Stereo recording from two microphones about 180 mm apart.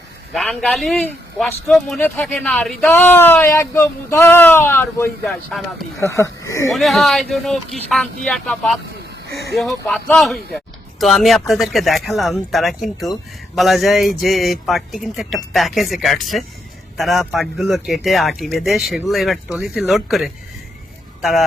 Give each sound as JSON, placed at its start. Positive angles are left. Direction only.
{"t": 0.3, "sound": "speech", "side_deg": 0}
{"t": 5.2, "sound": "speech", "side_deg": 0}
{"t": 6.0, "sound": "speech", "side_deg": 15}
{"t": 6.7, "sound": "speech", "side_deg": 0}
{"t": 9.8, "sound": "speech", "side_deg": 5}